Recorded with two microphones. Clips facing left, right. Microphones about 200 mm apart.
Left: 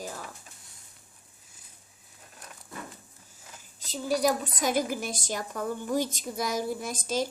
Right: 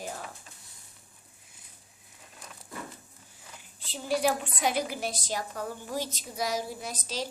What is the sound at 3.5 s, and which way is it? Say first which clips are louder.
A woman's voice: left 4 dB; 40° left (ahead or behind).